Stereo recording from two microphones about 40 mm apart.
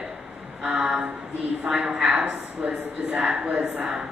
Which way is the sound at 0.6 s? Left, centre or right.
Right.